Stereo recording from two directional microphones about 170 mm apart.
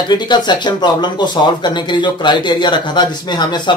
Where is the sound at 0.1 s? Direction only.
25° left (ahead or behind).